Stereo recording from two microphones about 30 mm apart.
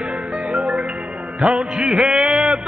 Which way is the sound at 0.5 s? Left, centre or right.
Right.